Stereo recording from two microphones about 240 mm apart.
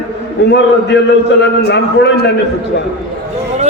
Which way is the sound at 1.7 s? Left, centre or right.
Left.